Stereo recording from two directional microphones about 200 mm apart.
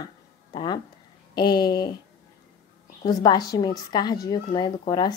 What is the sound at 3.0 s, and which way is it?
A woman's voice, 20° left (ahead or behind).